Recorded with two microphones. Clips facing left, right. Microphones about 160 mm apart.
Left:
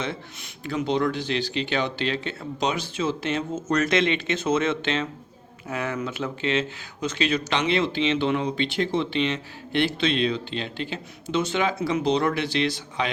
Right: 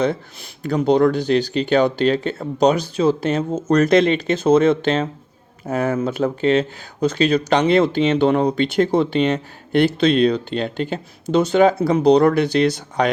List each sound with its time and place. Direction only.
0.6 s speech: 40° right (ahead or behind)